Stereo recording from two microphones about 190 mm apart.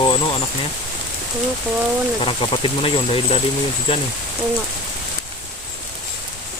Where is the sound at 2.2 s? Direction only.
25° left (ahead or behind).